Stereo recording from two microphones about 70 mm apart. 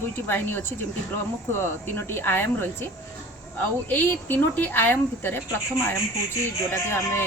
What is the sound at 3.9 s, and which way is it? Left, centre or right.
Speech, left.